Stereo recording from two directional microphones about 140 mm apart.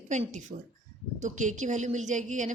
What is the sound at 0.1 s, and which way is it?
A woman's voice, 60° right (ahead or behind).